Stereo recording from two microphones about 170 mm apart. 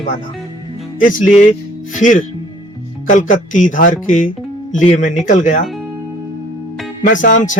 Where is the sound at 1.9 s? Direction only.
50° left (ahead or behind).